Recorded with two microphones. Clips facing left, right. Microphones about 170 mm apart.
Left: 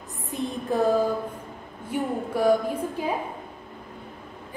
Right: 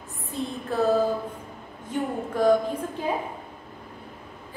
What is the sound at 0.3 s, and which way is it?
A woman's voice, 15° left (ahead or behind).